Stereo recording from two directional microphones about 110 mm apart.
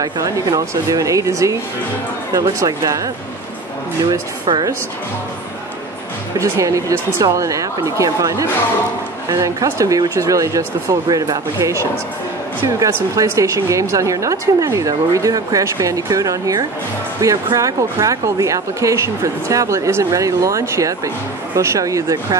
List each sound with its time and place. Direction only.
0.0 s speech: 35° right (ahead or behind)
6.4 s speech: 25° right (ahead or behind)